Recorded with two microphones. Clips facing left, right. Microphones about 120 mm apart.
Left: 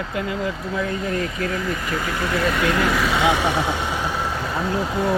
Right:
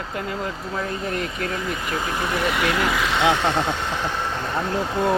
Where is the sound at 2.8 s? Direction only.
Centre (ahead or behind).